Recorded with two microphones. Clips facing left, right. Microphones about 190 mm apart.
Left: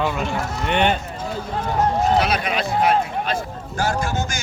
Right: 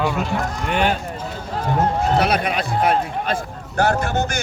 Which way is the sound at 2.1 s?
55° right (ahead or behind).